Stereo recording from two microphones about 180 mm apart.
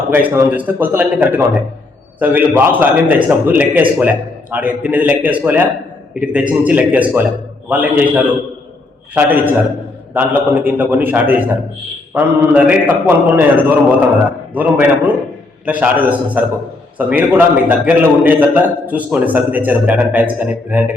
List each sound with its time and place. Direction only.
0.1 s a man's voice: 10° right (ahead or behind)